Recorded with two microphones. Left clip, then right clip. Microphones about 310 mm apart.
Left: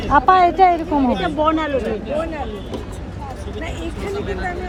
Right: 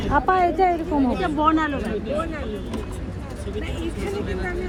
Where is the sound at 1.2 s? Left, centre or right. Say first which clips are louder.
Left 2 dB; centre.